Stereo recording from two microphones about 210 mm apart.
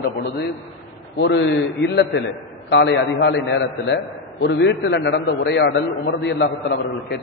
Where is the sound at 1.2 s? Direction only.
55° left (ahead or behind).